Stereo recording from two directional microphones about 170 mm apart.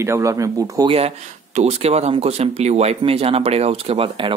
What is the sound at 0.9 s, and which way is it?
Speech, 35° right (ahead or behind).